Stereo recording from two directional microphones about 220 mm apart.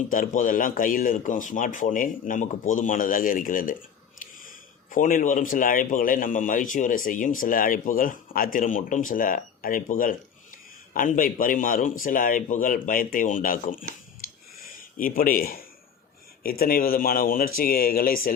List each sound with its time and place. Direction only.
0.1 s a man's voice: 35° left (ahead or behind)
14.2 s a sound: 40° left (ahead or behind)
14.6 s a man's voice: 40° left (ahead or behind)